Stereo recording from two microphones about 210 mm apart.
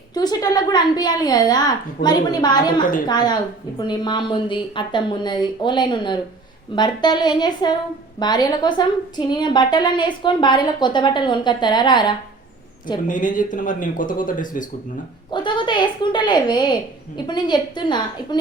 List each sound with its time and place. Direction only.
0.1 s a woman's voice: 20° left (ahead or behind)
13.1 s speech: 40° left (ahead or behind)
15.3 s a woman's voice: 20° left (ahead or behind)